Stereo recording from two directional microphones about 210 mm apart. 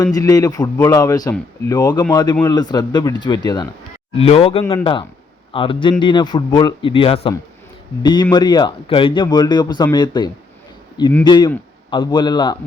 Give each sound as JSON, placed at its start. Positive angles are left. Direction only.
{"t": 0.0, "sound": "a man's voice", "side_deg": 15}